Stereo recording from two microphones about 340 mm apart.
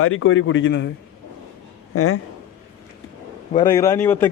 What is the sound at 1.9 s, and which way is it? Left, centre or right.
Speech, left.